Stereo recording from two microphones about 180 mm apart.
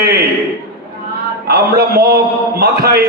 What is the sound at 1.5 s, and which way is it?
A man's voice, 60° right (ahead or behind).